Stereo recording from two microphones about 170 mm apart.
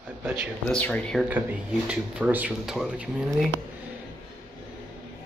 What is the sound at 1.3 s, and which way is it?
Speech, 5° right (ahead or behind).